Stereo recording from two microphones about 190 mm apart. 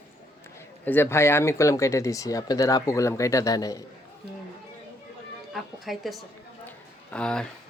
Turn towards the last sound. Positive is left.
turn(degrees=5)  # may be behind; listen again after turning